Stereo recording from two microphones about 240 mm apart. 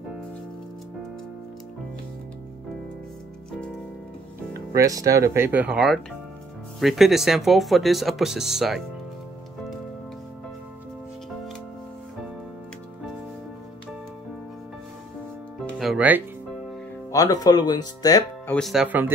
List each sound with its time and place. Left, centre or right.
4.6 s speech: centre
15.8 s music: centre
17.1 s speech: centre
18.6 s speech: centre